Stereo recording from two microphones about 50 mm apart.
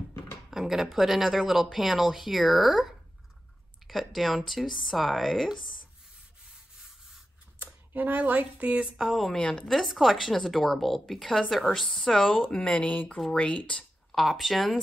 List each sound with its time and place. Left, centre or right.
0.5 s speech: centre
3.8 s speech: centre
7.6 s speech: right
8.8 s speech: centre
9.4 s speech: centre
9.7 s speech: centre
12.4 s speech: centre
12.8 s speech: left
14.1 s speech: centre